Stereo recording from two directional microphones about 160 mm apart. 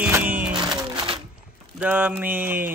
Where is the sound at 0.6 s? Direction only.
25° right (ahead or behind).